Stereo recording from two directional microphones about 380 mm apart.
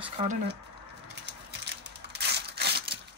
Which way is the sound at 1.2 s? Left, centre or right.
Right.